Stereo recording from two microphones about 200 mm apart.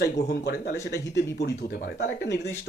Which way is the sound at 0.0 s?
55° left (ahead or behind).